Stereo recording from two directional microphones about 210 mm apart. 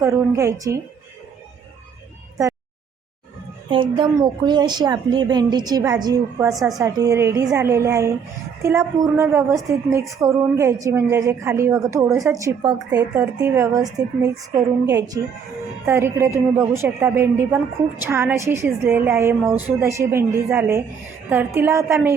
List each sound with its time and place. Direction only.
0.0 s a woman's voice: 15° right (ahead or behind)
3.7 s a woman's voice: 25° right (ahead or behind)
6.5 s a woman's voice: centre (ahead or behind)
6.7 s a woman's voice: 15° right (ahead or behind)